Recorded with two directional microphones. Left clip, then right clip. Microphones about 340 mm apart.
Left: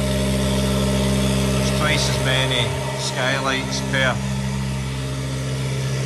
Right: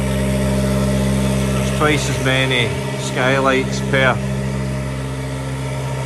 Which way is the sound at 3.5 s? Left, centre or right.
Left.